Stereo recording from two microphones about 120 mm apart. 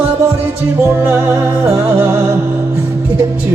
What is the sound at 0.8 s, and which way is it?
Music, 20° right (ahead or behind).